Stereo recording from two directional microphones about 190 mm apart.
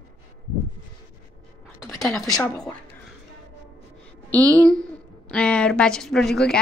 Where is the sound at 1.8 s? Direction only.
Centre (ahead or behind).